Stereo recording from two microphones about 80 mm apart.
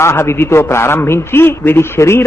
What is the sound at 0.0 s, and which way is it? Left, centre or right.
A man's voice, left.